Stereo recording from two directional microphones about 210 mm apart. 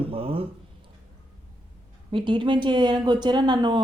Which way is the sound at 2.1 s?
20° right (ahead or behind).